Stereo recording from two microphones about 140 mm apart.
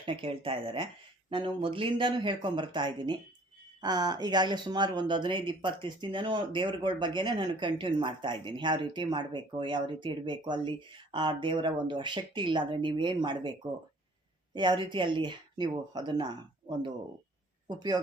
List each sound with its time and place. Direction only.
0.0 s speech: 40° right (ahead or behind)
14.5 s speech: 35° right (ahead or behind)